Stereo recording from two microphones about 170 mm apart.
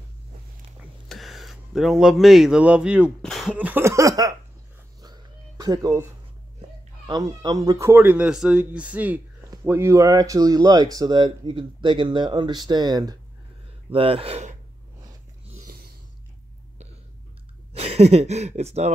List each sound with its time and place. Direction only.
1.0 s speech: centre (ahead or behind)
3.5 s a sound: 10° right (ahead or behind)
5.0 s cat: 25° right (ahead or behind)
7.1 s speech: 25° right (ahead or behind); by 14.6 s 40° right (ahead or behind)
15.5 s a sound: 55° right (ahead or behind)
17.7 s speech: 40° right (ahead or behind)